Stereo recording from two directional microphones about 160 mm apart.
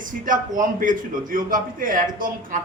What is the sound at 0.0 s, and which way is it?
A man's voice, 55° right (ahead or behind).